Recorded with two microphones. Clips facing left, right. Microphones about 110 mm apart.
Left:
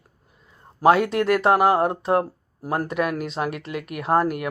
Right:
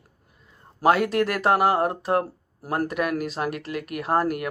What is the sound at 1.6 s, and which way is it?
A man's voice, 30° left (ahead or behind).